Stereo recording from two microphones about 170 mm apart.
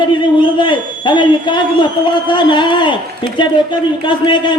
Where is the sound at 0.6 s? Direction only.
25° left (ahead or behind).